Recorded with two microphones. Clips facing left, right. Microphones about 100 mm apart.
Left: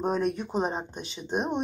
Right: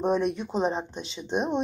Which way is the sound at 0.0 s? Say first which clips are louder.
Right 2 dB; centre (ahead or behind).